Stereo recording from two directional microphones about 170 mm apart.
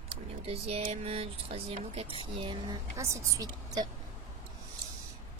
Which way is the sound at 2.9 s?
15° right (ahead or behind).